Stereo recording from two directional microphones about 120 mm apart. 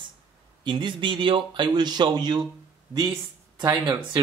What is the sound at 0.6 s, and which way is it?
Speech, 40° right (ahead or behind).